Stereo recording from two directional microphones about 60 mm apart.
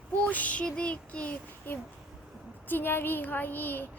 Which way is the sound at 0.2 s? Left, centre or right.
Left.